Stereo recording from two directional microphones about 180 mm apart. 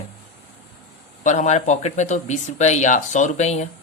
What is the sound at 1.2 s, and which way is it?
Speech, 40° left (ahead or behind).